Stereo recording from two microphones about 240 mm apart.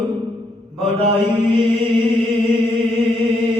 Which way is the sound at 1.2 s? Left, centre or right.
Centre.